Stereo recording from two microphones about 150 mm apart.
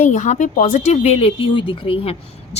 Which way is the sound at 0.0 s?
50° left (ahead or behind).